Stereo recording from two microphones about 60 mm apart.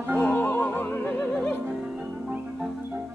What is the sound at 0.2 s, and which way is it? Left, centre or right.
Music, left.